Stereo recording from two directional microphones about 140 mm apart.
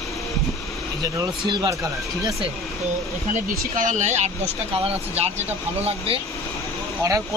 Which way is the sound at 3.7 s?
65° right (ahead or behind).